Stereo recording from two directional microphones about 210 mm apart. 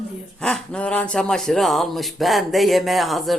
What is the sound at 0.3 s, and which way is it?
Speech, 5° left (ahead or behind).